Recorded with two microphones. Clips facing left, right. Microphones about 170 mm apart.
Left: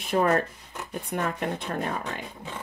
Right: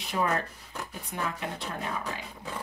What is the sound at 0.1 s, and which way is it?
Speech, 50° left (ahead or behind).